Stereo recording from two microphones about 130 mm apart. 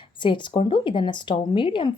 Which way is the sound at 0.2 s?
40° left (ahead or behind).